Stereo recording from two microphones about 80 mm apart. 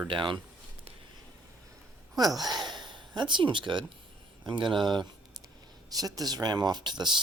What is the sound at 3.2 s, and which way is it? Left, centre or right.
Speech, right.